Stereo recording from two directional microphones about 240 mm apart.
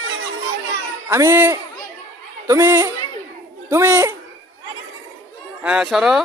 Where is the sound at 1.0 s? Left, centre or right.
Centre.